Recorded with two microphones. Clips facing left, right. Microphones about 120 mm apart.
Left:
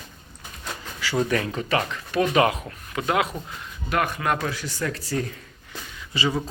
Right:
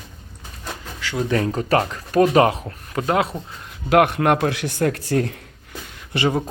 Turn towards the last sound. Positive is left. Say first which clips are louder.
# right 5 dB
turn(degrees=-60)  # may be behind; listen again after turning